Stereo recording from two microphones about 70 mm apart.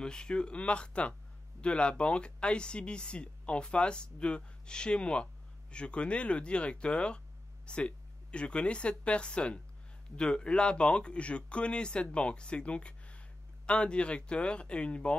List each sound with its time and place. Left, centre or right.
0.0 s speech: centre